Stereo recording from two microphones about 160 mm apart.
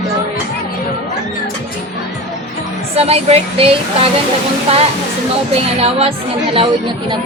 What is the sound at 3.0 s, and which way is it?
Speech, 40° right (ahead or behind).